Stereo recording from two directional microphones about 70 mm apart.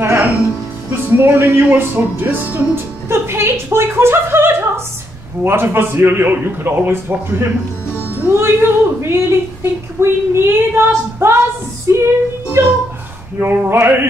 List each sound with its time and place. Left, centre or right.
0.0 s music: right
1.1 s speech: right
3.1 s a woman's voice: right